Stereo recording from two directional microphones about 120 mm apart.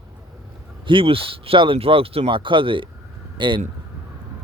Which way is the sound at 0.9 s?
45° right (ahead or behind).